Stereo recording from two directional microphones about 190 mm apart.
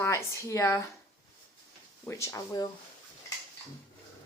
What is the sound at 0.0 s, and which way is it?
Speech, 15° left (ahead or behind).